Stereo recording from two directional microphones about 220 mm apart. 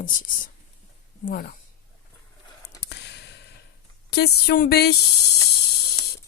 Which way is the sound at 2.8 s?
50° left (ahead or behind).